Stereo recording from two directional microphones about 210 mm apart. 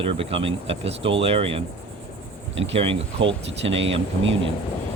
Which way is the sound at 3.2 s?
60° right (ahead or behind).